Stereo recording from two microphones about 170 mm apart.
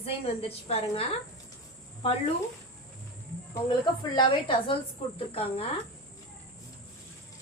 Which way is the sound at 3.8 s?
25° left (ahead or behind).